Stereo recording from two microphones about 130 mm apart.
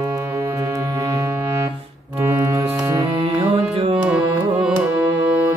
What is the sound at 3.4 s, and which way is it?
Music, 40° right (ahead or behind).